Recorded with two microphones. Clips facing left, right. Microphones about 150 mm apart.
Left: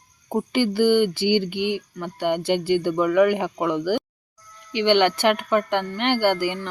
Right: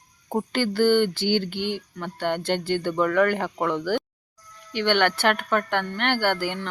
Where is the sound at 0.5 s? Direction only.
10° left (ahead or behind).